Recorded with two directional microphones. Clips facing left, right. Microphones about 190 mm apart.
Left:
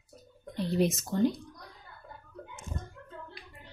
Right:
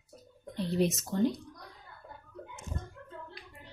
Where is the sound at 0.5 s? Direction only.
5° left (ahead or behind).